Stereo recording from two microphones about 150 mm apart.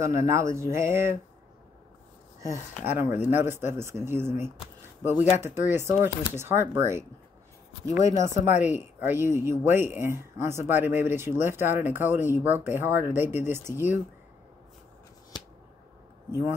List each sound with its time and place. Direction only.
0.0 s speech: 20° right (ahead or behind)
3.0 s speech: 15° right (ahead or behind)
16.3 s speech: 15° right (ahead or behind)